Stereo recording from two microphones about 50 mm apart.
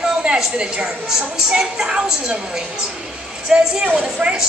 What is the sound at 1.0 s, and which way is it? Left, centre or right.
Speech, centre.